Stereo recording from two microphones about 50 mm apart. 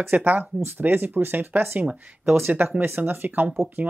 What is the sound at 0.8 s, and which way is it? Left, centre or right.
Speech, right.